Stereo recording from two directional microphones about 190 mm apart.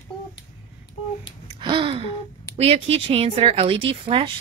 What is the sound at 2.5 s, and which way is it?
Speech, 30° right (ahead or behind).